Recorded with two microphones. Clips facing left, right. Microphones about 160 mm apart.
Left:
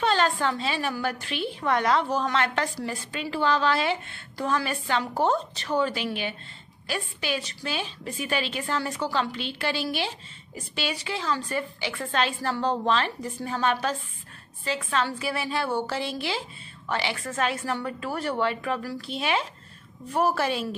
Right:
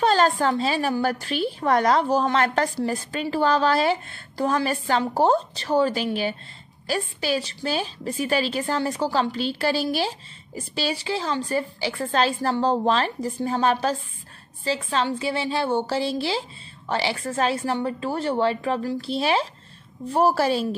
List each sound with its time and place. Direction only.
0.0 s a woman's voice: 40° right (ahead or behind)